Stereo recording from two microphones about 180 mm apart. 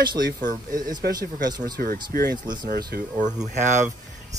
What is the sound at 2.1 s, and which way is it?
Speech, 55° right (ahead or behind).